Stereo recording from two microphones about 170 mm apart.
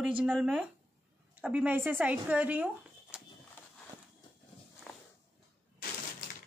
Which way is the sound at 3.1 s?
5° right (ahead or behind).